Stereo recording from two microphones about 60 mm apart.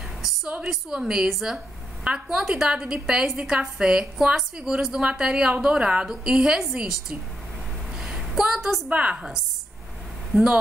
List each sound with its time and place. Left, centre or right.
0.7 s a woman's voice: centre
8.0 s a sound: centre
8.8 s a woman's voice: right
10.3 s a woman's voice: centre